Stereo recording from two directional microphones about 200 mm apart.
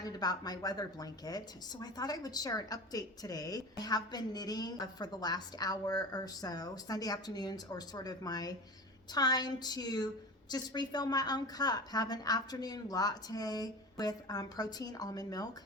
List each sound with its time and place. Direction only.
0.0 s a woman's voice: 20° left (ahead or behind)